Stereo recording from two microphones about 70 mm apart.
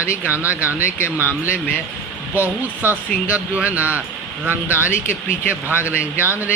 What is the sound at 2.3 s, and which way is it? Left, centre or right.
Speech, right.